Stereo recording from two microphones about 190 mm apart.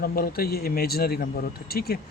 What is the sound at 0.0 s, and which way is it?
Speech, 50° left (ahead or behind).